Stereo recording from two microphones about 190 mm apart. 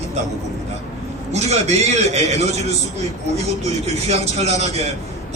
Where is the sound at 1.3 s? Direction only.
35° right (ahead or behind).